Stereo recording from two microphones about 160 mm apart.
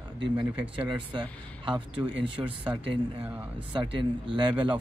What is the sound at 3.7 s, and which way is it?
Speech, 30° right (ahead or behind).